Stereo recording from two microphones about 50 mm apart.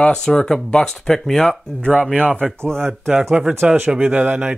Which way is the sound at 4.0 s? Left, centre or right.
Right.